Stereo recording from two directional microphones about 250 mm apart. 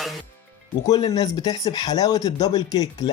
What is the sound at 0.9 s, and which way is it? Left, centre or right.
Speech, centre.